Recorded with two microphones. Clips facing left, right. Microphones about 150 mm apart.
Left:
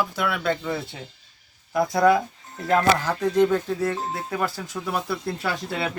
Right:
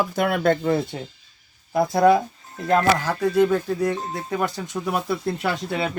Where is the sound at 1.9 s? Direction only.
20° right (ahead or behind).